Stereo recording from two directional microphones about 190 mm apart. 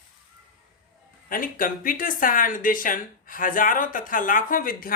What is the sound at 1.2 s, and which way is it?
Speech, 45° left (ahead or behind).